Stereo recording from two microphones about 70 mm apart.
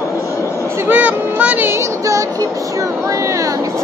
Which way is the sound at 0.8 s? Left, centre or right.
Centre.